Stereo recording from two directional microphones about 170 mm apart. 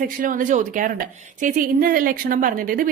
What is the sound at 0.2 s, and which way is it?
A woman's voice, 50° right (ahead or behind).